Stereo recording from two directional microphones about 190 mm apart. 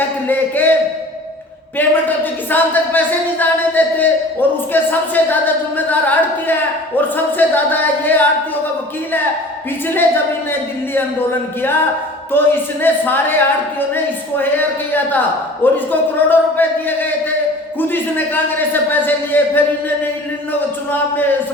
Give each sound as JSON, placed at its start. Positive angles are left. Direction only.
{"t": 0.3, "sound": "a sound", "side_deg": 10}
{"t": 1.8, "sound": "speech", "side_deg": 10}
{"t": 10.5, "sound": "speech", "side_deg": 10}
{"t": 17.7, "sound": "speech", "side_deg": 10}
{"t": 20.9, "sound": "speech", "side_deg": 10}